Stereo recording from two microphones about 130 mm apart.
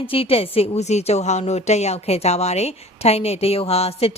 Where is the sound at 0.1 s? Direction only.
45° left (ahead or behind).